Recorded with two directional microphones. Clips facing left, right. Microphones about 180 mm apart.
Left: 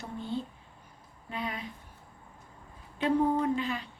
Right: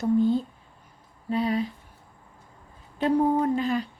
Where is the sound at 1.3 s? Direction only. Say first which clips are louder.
Right 12 dB; 35° right (ahead or behind).